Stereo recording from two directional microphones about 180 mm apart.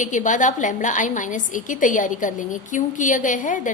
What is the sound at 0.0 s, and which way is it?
A woman's voice, 45° left (ahead or behind).